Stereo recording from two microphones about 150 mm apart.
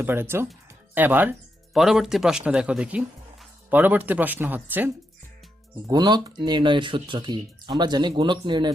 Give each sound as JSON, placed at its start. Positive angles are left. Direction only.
{"t": 0.0, "sound": "speech", "side_deg": -15}
{"t": 5.9, "sound": "speech", "side_deg": -25}